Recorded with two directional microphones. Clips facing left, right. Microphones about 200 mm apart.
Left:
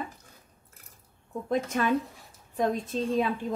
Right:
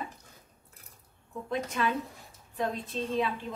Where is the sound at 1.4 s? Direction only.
45° left (ahead or behind).